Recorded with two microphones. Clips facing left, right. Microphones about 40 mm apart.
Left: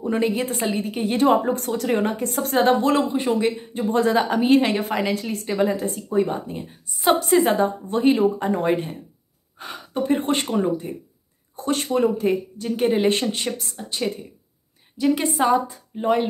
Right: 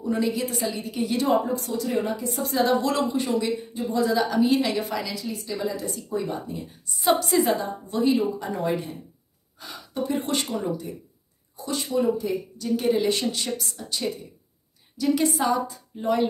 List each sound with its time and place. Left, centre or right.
0.0 s a woman's voice: left
5.2 s a woman's voice: left
11.5 s speech: left
12.5 s a woman's voice: left